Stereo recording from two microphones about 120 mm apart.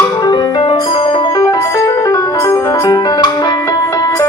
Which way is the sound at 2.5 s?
35° left (ahead or behind).